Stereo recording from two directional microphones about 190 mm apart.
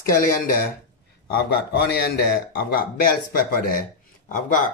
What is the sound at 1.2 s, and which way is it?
Speech, 55° left (ahead or behind).